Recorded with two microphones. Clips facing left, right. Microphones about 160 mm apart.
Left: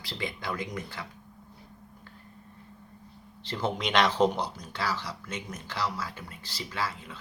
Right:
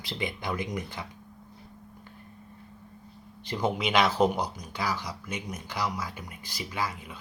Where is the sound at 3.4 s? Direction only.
10° right (ahead or behind).